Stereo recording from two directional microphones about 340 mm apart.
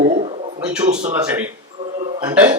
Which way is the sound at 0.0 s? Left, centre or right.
Centre.